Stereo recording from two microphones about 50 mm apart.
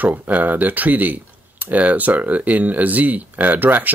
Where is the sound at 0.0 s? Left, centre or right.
Right.